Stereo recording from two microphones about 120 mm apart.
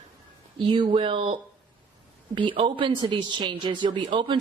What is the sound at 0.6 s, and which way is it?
Speech, 40° right (ahead or behind).